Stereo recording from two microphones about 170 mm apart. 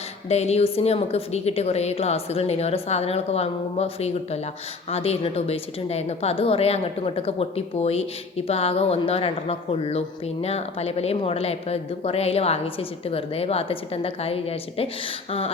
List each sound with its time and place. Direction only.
0.3 s a woman's voice: 40° left (ahead or behind)